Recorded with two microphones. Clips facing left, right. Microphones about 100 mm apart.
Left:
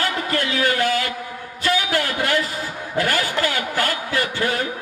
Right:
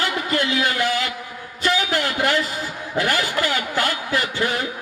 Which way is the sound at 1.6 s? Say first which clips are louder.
Even; 25° right (ahead or behind).